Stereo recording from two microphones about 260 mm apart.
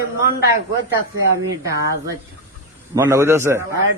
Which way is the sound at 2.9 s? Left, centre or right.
Centre.